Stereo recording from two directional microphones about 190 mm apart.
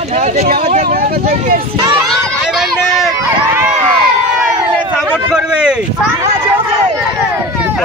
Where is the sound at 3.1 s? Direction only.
10° right (ahead or behind).